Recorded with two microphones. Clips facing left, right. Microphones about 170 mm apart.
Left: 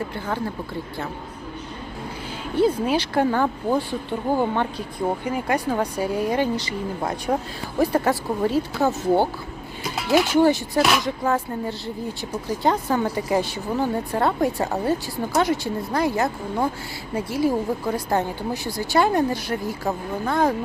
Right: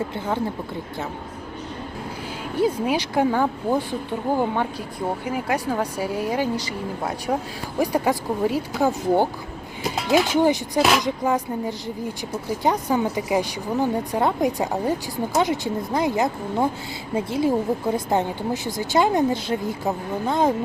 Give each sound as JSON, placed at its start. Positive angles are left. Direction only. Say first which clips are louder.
{"t": 2.6, "sound": "a woman's voice", "louder": "left 2 dB", "side_deg": -10}
{"t": 7.8, "sound": "a woman's voice", "louder": "left 1 dB", "side_deg": -15}
{"t": 12.6, "sound": "a woman's voice", "louder": "even", "side_deg": -10}